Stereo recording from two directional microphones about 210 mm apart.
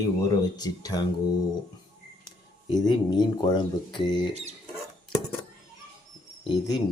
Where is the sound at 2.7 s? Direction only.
20° left (ahead or behind).